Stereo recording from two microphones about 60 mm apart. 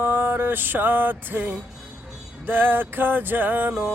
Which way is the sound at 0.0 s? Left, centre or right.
Right.